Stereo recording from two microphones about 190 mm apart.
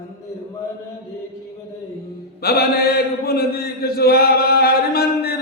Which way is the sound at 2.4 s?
55° left (ahead or behind).